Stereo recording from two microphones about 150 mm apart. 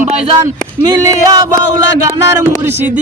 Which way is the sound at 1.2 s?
25° right (ahead or behind).